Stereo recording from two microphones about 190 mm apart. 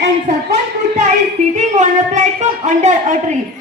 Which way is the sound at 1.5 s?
40° right (ahead or behind).